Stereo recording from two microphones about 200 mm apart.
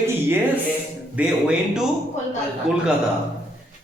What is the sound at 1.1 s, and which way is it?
Speech, 5° right (ahead or behind).